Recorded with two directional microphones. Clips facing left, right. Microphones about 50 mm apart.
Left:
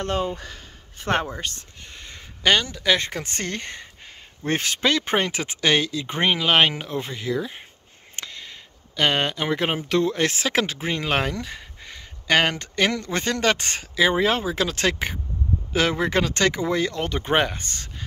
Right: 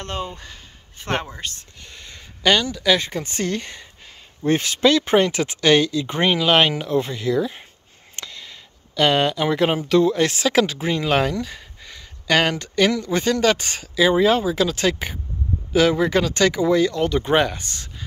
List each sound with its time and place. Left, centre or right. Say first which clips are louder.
1.8 s speech: even; left
3.1 s speech: right 5 dB; left; by 7.6 s centre
8.2 s a sound: even; left
9.8 s speech: right 3 dB; left